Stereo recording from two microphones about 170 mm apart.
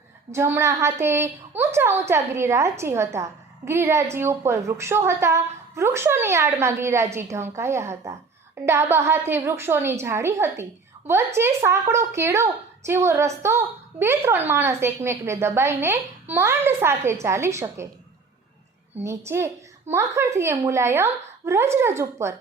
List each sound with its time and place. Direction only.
0.3 s a woman's voice: 15° right (ahead or behind)
19.0 s a woman's voice: 15° right (ahead or behind)